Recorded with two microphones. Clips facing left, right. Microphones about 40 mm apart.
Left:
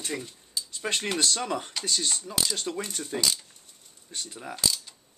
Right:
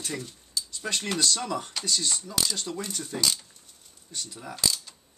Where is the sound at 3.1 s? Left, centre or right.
Centre.